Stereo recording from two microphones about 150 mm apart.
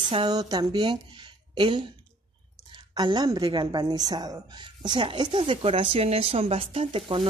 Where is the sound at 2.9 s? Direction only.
30° right (ahead or behind).